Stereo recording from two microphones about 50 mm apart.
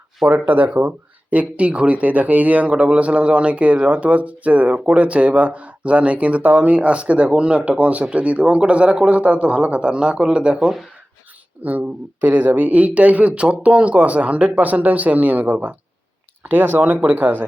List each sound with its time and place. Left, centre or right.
0.3 s speech: right
11.6 s speech: right